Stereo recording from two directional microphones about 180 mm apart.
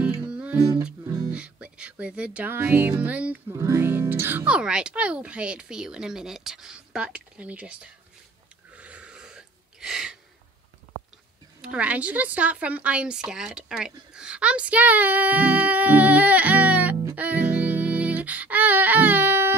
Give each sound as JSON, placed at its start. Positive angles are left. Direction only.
{"t": 0.0, "sound": "music", "side_deg": -5}
{"t": 0.8, "sound": "music", "side_deg": -20}
{"t": 1.3, "sound": "speech", "side_deg": -5}
{"t": 8.7, "sound": "a sound", "side_deg": -5}
{"t": 11.6, "sound": "speech", "side_deg": -5}